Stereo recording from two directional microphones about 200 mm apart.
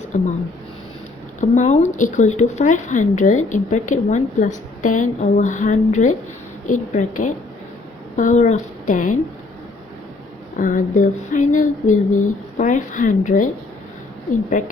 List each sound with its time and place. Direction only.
0.1 s speech: 40° left (ahead or behind)
1.4 s speech: 35° left (ahead or behind)
10.6 s speech: 40° left (ahead or behind)
14.5 s speech: 40° left (ahead or behind)